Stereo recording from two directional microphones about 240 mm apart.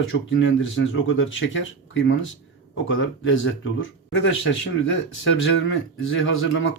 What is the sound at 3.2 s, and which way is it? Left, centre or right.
A man's voice, left.